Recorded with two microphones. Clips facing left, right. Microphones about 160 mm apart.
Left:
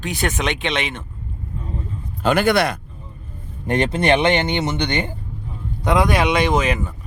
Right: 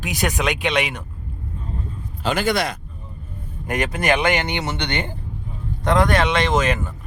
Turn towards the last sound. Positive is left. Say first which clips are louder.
# left 1 dB
turn(degrees=10)  # may be behind; listen again after turning